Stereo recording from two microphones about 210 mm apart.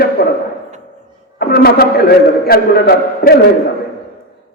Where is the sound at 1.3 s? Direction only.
45° left (ahead or behind).